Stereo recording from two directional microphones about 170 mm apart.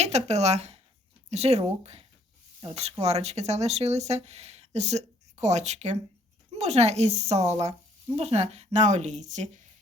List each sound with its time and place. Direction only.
0.0 s speech: 40° right (ahead or behind)